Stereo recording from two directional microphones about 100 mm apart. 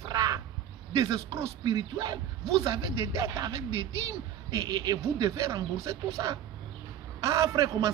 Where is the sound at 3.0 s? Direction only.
30° right (ahead or behind).